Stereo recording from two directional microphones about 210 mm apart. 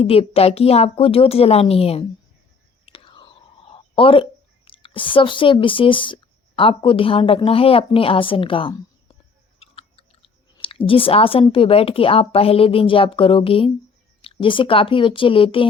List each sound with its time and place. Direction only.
0.0 s speech: 30° left (ahead or behind)
9.6 s chewing: 25° left (ahead or behind)
10.6 s speech: 25° left (ahead or behind)